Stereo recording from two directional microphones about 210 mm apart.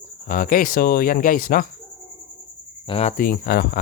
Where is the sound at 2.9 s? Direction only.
30° left (ahead or behind).